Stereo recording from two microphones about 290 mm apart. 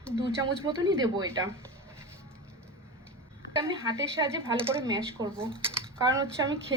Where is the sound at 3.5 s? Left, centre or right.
Centre.